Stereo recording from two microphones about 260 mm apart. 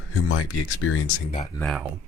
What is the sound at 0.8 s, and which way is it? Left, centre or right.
Speech, left.